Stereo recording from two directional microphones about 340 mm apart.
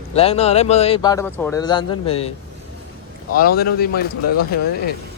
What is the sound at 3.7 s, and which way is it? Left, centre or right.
Speech, left.